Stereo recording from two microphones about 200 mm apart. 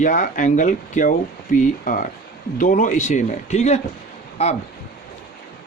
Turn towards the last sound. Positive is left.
turn(degrees=30)  # may be behind; listen again after turning